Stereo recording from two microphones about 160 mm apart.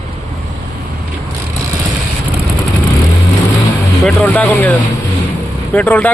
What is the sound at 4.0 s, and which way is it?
Speech, 10° left (ahead or behind).